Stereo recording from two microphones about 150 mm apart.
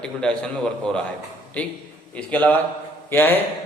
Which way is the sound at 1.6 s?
10° left (ahead or behind).